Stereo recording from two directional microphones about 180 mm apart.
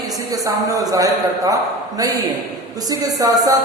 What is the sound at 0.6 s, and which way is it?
Speech, 20° right (ahead or behind).